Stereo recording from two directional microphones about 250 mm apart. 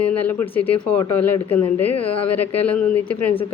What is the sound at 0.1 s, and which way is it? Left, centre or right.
A woman's voice, centre.